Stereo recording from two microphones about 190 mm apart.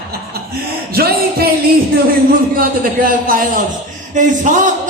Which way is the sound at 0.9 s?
55° right (ahead or behind).